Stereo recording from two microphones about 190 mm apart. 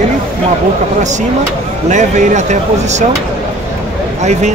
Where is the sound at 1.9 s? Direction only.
40° right (ahead or behind).